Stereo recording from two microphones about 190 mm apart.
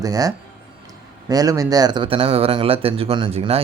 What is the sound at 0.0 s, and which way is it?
Speech, 20° right (ahead or behind).